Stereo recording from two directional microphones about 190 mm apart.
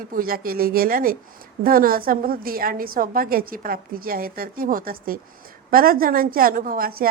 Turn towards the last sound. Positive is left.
turn(degrees=-50)  # may be behind; listen again after turning